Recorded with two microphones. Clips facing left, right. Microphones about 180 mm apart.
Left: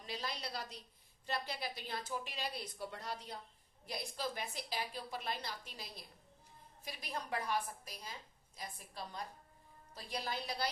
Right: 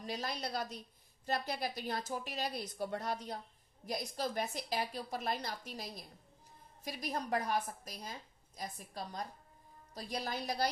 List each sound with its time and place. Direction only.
0.0 s a woman's voice: 45° right (ahead or behind)